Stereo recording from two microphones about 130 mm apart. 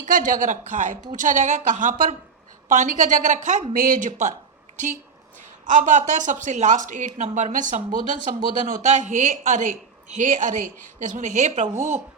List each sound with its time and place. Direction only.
0.0 s speech: 90° right; by 2.1 s 70° right (ahead or behind)
2.6 s speech: 85° right
3.7 s speech: 85° right
5.6 s speech: 75° right (ahead or behind)
8.6 s speech: 75° right (ahead or behind)
10.2 s speech: 80° right
11.0 s speech: 75° right (ahead or behind)